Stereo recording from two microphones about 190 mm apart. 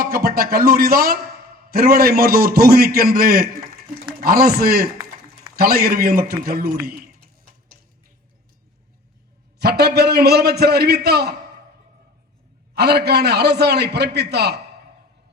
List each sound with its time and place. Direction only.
0.0 s a man's voice: 50° right (ahead or behind)
9.6 s a man's voice: 60° right (ahead or behind)
12.7 s a man's voice: 55° right (ahead or behind)